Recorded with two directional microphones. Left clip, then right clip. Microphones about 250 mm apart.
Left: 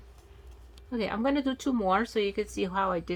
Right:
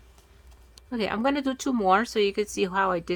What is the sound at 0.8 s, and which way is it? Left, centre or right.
Speech, right.